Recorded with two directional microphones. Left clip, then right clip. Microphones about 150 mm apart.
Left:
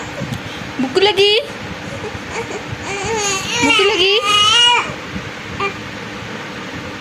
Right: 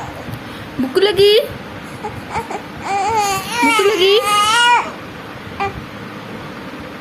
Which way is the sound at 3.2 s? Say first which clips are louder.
Right 1 dB; 35° right (ahead or behind).